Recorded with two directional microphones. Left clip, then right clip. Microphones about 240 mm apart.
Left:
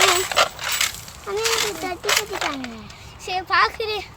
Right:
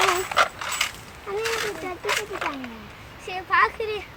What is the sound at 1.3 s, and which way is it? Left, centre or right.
A child's voice, centre.